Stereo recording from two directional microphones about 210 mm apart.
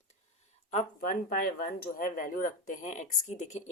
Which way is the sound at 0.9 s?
45° left (ahead or behind).